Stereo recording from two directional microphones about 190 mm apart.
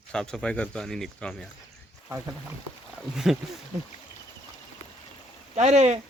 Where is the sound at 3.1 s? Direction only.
Centre (ahead or behind).